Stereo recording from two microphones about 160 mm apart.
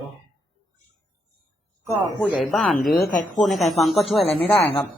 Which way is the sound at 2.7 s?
65° left (ahead or behind).